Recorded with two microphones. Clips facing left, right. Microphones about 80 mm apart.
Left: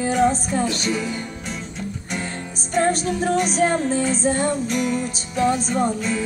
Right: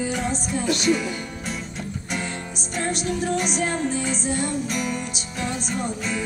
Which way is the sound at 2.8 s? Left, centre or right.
Left.